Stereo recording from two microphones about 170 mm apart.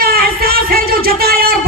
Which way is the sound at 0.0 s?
60° right (ahead or behind).